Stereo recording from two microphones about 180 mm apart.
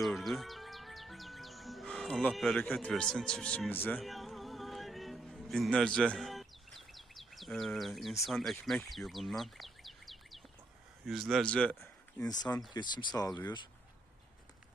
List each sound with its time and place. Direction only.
0.0 s speech: centre (ahead or behind)
4.0 s music: centre (ahead or behind)
8.3 s speech: centre (ahead or behind)
12.7 s speech: 25° left (ahead or behind)